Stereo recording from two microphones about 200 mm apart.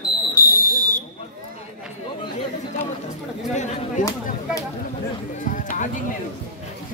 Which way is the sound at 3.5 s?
35° left (ahead or behind).